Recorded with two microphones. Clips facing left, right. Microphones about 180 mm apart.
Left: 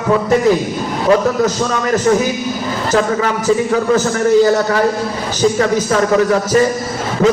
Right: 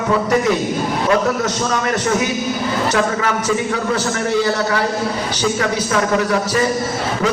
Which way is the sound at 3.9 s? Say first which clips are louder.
Left 8 dB; 40° left (ahead or behind).